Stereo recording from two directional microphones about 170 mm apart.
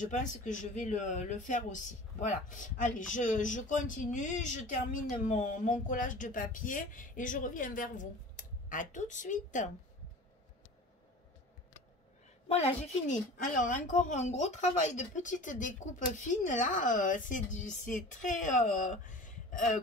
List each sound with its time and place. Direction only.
0.0 s a woman's voice: 45° left (ahead or behind)
12.4 s a woman's voice: 40° left (ahead or behind)